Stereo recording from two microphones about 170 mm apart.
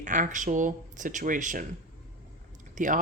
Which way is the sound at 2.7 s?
50° right (ahead or behind).